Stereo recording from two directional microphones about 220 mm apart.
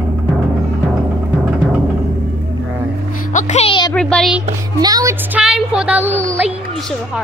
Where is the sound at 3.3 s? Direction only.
30° left (ahead or behind).